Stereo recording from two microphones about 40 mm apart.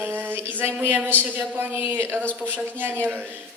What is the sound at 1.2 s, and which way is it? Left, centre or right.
Speech, right.